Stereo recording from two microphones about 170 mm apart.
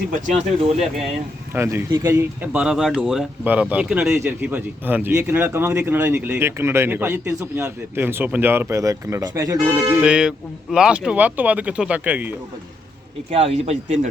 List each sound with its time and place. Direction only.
0.1 s speech: 40° right (ahead or behind)
1.5 s speech: 15° right (ahead or behind)
10.0 s speech: 5° right (ahead or behind)
13.3 s speech: 35° right (ahead or behind)